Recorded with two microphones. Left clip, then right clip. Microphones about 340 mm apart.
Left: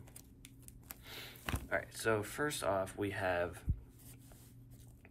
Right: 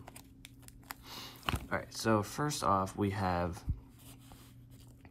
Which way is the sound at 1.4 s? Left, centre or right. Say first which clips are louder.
Right 2 dB; centre.